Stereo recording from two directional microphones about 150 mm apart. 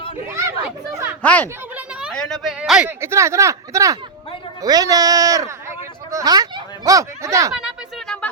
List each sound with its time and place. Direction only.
0.3 s chatter: 20° right (ahead or behind)
1.2 s speech: 10° left (ahead or behind)
1.7 s children playing: 5° right (ahead or behind)
2.1 s speech: 5° left (ahead or behind)
3.0 s speech: 20° right (ahead or behind)
7.5 s a sound: 5° right (ahead or behind)